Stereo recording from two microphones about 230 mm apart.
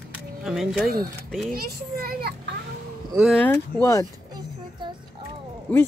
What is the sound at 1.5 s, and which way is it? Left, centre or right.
Speech, right.